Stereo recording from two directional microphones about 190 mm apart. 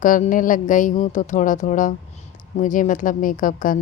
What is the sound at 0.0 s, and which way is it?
A woman's voice, 45° left (ahead or behind).